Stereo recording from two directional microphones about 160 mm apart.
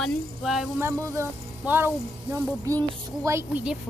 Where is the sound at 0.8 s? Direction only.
15° right (ahead or behind).